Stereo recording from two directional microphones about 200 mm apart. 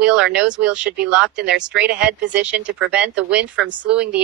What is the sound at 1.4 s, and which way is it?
Speech, 60° right (ahead or behind).